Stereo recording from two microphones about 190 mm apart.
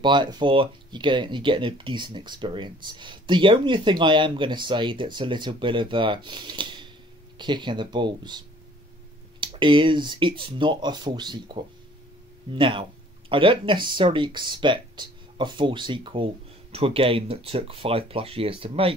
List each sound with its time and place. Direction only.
0.0 s speech: 25° right (ahead or behind)